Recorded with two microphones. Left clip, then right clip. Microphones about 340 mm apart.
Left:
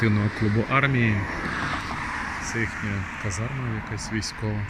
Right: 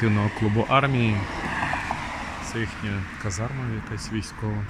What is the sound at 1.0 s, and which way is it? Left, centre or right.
Speech, right.